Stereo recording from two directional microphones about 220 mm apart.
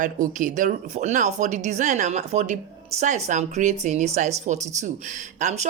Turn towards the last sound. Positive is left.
turn(degrees=-35)  # may be behind; listen again after turning